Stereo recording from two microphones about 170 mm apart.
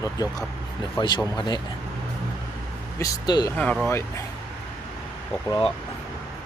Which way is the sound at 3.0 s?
20° left (ahead or behind).